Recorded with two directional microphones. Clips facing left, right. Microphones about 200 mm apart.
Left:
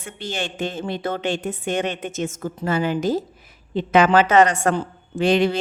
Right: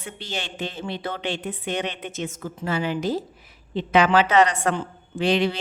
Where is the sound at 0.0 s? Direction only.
50° left (ahead or behind).